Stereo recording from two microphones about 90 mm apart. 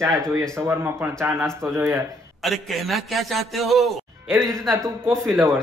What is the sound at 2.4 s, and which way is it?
A man's voice, centre (ahead or behind).